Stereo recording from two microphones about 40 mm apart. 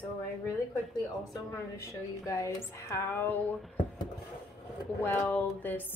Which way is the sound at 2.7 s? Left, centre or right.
Left.